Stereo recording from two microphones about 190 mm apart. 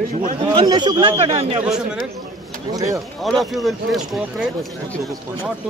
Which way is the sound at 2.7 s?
20° right (ahead or behind).